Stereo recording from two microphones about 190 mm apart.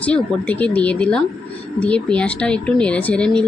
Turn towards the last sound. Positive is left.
turn(degrees=5)  # may be behind; listen again after turning